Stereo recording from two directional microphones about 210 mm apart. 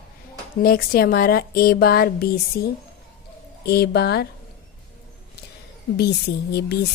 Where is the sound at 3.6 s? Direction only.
50° left (ahead or behind).